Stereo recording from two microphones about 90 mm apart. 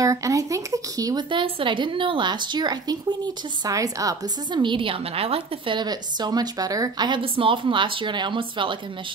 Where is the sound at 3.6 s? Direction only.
40° right (ahead or behind).